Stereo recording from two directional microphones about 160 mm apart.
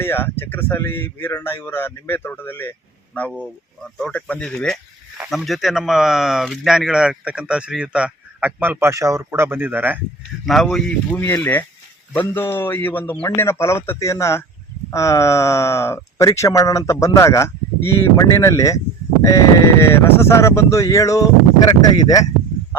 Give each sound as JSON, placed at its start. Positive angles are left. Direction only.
{"t": 0.0, "sound": "speech", "side_deg": 15}
{"t": 10.4, "sound": "speech", "side_deg": 0}